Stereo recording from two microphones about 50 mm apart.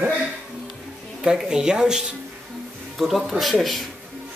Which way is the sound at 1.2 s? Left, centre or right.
Centre.